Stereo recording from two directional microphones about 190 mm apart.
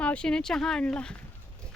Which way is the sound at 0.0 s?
5° left (ahead or behind).